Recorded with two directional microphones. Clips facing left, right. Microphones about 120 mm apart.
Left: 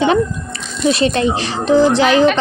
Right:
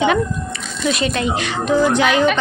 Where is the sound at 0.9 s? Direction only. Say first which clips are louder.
Left 5 dB; 30° left (ahead or behind).